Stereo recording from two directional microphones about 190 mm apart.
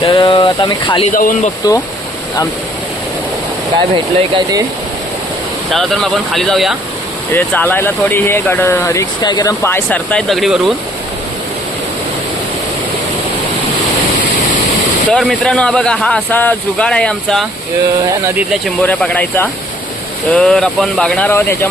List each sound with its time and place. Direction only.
0.0 s speech: 25° left (ahead or behind)
1.1 s speech: 45° left (ahead or behind)
3.9 s speech: 25° right (ahead or behind)
5.7 s speech: centre (ahead or behind)
15.1 s speech: centre (ahead or behind)
18.6 s speech: 5° left (ahead or behind)